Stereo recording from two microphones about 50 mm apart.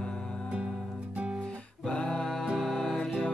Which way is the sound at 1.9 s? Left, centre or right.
Left.